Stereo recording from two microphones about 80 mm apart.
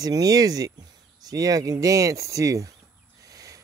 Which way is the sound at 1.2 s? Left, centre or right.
Right.